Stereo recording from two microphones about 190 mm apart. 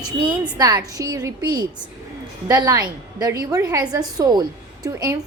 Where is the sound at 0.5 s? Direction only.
20° right (ahead or behind).